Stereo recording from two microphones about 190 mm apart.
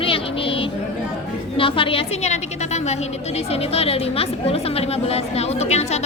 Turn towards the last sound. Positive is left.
turn(degrees=35)  # may be behind; listen again after turning